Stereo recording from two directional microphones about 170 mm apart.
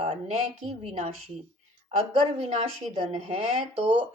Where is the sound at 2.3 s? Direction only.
40° right (ahead or behind).